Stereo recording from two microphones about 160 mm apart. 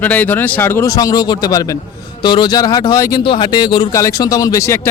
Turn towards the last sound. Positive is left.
turn(degrees=20)  # may be behind; listen again after turning